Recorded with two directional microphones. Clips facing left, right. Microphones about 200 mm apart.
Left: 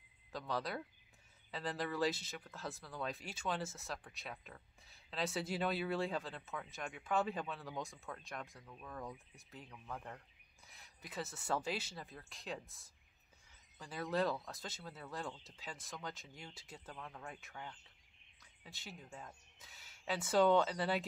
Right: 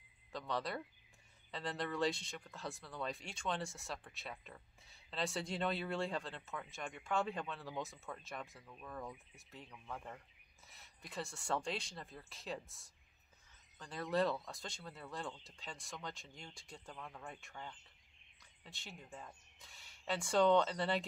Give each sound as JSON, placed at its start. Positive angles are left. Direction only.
{"t": 0.3, "sound": "speech", "side_deg": 0}